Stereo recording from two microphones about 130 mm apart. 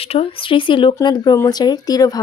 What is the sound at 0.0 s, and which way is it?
Speech, 50° left (ahead or behind).